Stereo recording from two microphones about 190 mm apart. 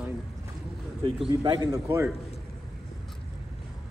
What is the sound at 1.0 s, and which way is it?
A man's voice, 25° right (ahead or behind).